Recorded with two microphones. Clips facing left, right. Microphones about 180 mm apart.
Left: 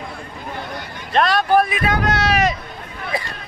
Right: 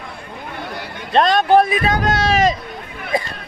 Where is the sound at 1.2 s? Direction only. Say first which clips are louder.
Right 3 dB; 20° right (ahead or behind).